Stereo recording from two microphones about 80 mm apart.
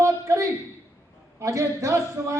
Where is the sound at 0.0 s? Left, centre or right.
Right.